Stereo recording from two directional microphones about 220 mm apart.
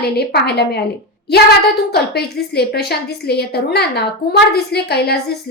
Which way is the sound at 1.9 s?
45° left (ahead or behind).